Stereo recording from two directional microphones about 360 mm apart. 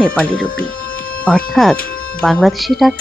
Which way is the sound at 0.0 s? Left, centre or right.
Centre.